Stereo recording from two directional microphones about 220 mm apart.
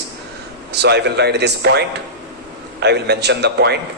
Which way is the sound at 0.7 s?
50° right (ahead or behind).